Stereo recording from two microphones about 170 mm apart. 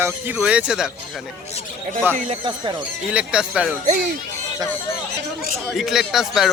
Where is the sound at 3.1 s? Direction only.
5° right (ahead or behind).